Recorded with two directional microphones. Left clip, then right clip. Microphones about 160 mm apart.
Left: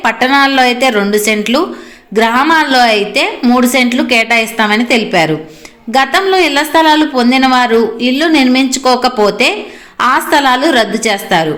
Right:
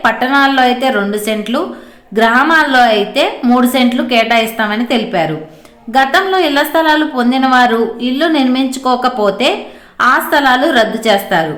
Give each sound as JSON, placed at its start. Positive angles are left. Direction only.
{"t": 0.0, "sound": "a woman's voice", "side_deg": 20}